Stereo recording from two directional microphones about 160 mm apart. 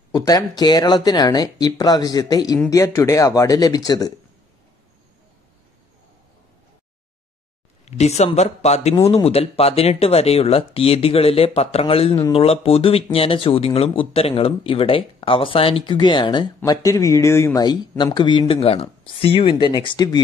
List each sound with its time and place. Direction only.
0.1 s speech: 25° left (ahead or behind)
7.8 s speech: 45° left (ahead or behind); by 20.2 s 30° left (ahead or behind)